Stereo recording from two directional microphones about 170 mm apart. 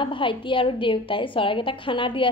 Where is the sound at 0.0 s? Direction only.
30° left (ahead or behind).